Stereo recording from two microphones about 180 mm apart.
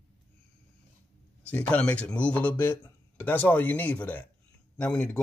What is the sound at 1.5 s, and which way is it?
A man's voice, 5° left (ahead or behind).